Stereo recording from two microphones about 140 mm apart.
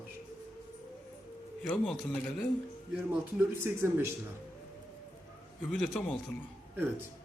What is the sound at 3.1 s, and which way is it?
Speech, 15° right (ahead or behind).